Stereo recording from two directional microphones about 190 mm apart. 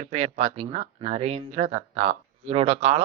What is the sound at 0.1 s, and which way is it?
Speech, 35° right (ahead or behind).